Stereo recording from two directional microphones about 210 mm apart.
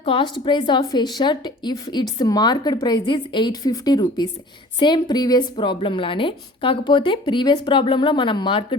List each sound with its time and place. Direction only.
0.0 s a woman's voice: 25° left (ahead or behind)